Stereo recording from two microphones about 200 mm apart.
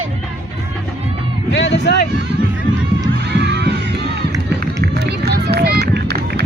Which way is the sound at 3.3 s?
55° right (ahead or behind).